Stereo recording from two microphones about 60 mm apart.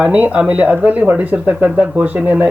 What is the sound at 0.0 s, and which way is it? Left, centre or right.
Speech, right.